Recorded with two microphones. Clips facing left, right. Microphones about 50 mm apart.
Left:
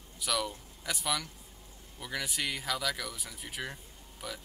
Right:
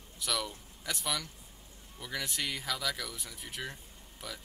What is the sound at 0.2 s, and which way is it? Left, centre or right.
Speech, centre.